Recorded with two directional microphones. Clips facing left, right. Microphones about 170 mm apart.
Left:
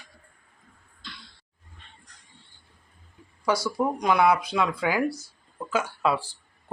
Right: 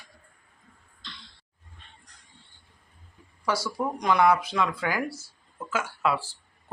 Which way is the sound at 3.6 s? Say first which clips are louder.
Left 2 dB; 10° left (ahead or behind).